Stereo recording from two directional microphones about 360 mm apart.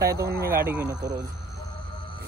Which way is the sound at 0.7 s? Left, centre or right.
Centre.